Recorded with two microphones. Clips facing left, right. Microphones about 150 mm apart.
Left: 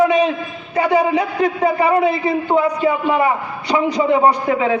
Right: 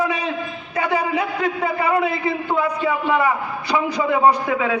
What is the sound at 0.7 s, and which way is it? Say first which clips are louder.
A man's voice: left 6 dB; 30° left (ahead or behind).